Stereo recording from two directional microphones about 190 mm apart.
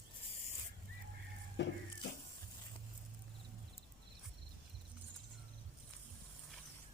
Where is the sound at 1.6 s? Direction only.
70° left (ahead or behind).